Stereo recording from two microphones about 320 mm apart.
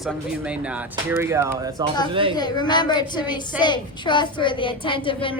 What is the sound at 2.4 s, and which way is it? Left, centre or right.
A woman's voice, centre.